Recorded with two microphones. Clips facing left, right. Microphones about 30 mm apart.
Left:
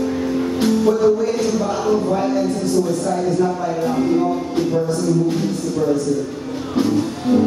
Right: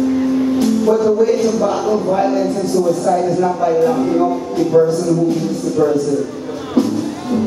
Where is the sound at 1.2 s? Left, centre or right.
Centre.